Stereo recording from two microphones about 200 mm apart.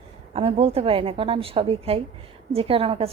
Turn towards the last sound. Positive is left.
turn(degrees=-25)  # may be behind; listen again after turning